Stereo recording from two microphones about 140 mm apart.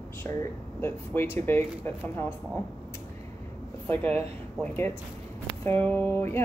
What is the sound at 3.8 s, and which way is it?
Speech, 15° left (ahead or behind).